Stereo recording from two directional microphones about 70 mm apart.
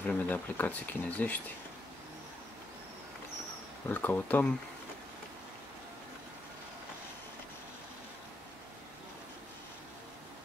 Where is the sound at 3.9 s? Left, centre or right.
Left.